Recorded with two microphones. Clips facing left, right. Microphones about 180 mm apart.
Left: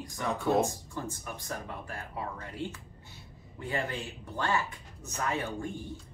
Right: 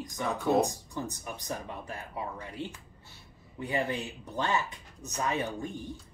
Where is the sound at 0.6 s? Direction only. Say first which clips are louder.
Right 1 dB; 20° right (ahead or behind).